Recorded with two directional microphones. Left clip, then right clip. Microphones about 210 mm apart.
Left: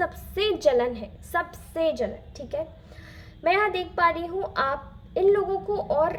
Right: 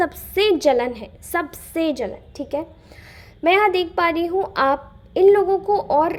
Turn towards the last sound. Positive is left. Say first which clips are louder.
# right 6 dB
turn(degrees=-35)  # may be behind; listen again after turning